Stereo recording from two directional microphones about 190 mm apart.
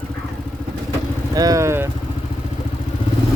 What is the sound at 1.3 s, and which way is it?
Speech, 20° right (ahead or behind).